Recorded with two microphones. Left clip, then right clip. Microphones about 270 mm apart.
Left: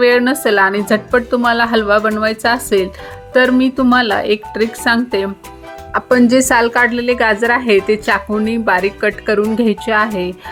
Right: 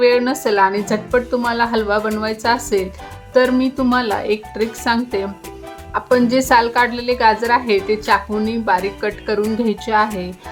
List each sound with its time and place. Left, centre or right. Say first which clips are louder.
0.0 s a woman's voice: left 3 dB; centre